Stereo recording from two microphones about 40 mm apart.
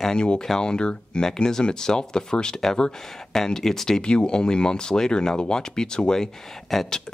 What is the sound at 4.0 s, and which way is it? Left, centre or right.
Speech, left.